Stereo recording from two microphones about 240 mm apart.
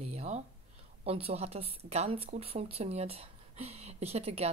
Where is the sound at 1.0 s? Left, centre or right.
Right.